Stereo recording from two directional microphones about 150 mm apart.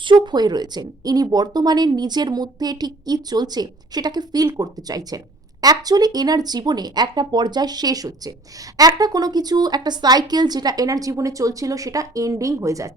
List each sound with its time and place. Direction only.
0.0 s speech: 30° right (ahead or behind)